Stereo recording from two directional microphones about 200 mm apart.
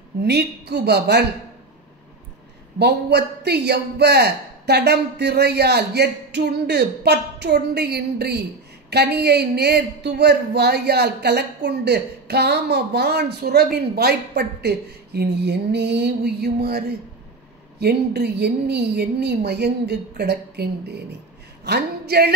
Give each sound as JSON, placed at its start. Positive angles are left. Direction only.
{"t": 0.2, "sound": "a man's voice", "side_deg": -55}
{"t": 2.8, "sound": "a man's voice", "side_deg": -55}